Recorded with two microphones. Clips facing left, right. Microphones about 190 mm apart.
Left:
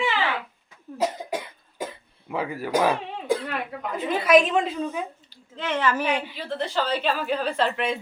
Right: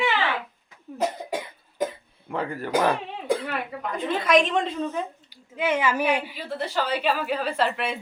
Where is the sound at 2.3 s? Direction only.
5° left (ahead or behind).